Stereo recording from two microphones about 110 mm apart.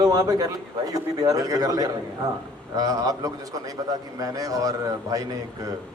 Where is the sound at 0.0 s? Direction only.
35° right (ahead or behind).